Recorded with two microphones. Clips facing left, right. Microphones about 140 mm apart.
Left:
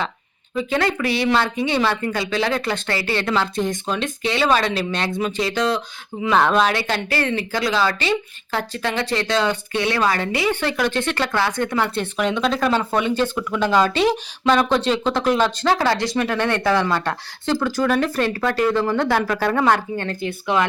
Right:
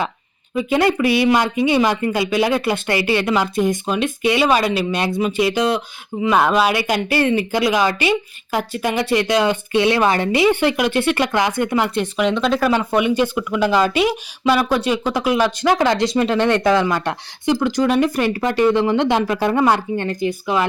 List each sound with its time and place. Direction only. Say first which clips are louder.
0.5 s speech: right 4 dB; 15° right (ahead or behind)
12.2 s speech: right 2 dB; centre (ahead or behind)